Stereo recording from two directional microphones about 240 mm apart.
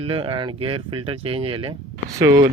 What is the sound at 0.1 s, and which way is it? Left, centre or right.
Speech, right.